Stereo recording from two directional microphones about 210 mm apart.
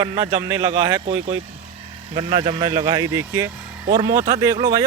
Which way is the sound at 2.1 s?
30° right (ahead or behind).